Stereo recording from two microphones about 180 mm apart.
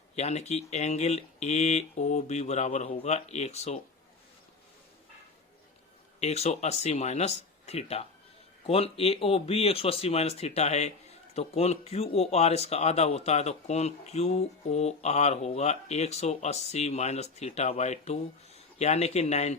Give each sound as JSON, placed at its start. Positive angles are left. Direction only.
{"t": 0.2, "sound": "speech", "side_deg": 40}
{"t": 6.1, "sound": "speech", "side_deg": 35}